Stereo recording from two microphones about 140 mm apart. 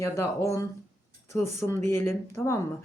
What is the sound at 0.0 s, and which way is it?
Speech, 20° left (ahead or behind).